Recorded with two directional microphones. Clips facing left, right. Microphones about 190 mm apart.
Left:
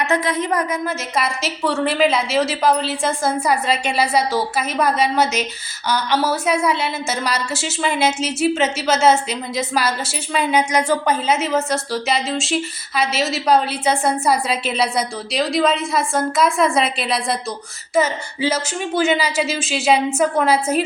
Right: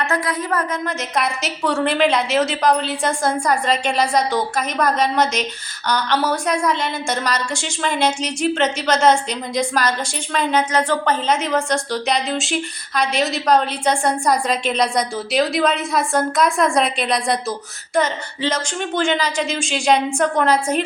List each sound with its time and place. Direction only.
0.0 s a woman's voice: 20° left (ahead or behind)
0.7 s a woman's voice: 5° left (ahead or behind)